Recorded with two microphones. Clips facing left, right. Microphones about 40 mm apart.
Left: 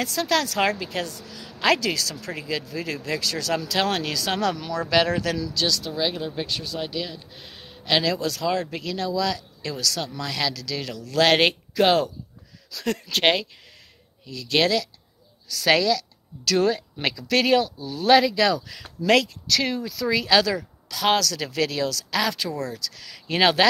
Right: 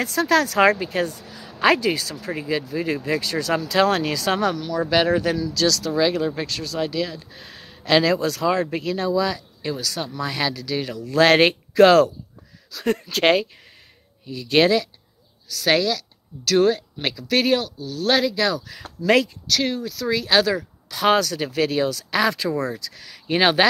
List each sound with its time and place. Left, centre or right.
0.0 s a woman's voice: right
4.7 s speech: centre
5.5 s speech: right
5.9 s a woman's voice: right
10.0 s speech: right
11.2 s speech: right
11.8 s speech: right
14.5 s a woman's voice: right
15.4 s a woman's voice: centre
19.5 s a woman's voice: centre
20.9 s a woman's voice: right
21.2 s speech: right
22.2 s a woman's voice: right
23.3 s speech: right